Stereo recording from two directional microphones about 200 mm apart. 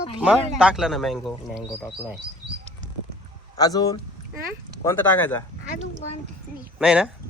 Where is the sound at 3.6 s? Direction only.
20° left (ahead or behind).